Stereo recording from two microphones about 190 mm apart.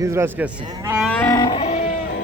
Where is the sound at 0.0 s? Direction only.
15° right (ahead or behind).